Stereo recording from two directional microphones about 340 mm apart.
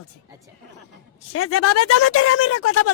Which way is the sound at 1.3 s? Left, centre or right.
Left.